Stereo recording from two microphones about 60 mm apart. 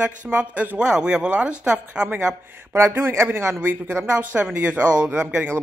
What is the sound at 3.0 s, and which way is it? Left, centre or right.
Speech, right.